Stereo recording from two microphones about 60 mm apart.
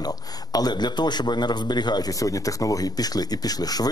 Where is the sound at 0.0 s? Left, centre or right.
Left.